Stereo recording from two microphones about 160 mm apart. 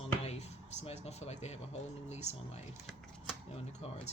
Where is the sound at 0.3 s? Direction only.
45° left (ahead or behind).